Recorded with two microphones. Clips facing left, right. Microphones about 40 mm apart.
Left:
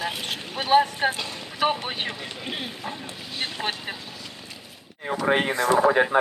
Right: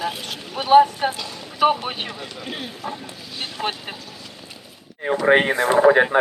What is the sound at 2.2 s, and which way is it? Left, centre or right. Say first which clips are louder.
Speech: right 1 dB; centre.